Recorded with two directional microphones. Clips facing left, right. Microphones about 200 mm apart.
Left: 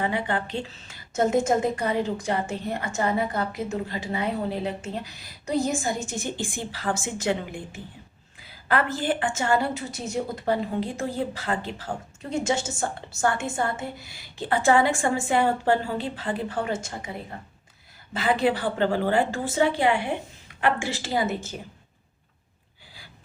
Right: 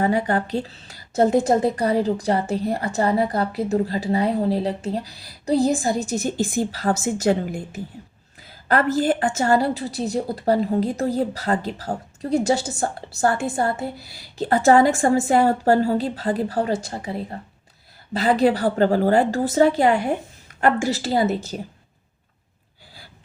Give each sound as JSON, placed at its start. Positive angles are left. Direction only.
{"t": 0.0, "sound": "a woman's voice", "side_deg": -40}